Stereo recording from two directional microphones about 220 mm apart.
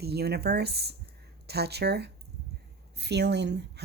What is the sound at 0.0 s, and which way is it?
Speech, 45° right (ahead or behind).